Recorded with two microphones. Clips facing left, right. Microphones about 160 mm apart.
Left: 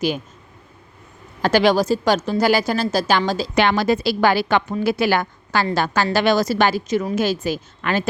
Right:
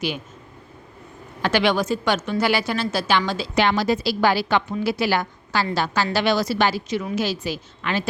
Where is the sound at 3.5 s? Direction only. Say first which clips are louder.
Left 2 dB; 60° left (ahead or behind).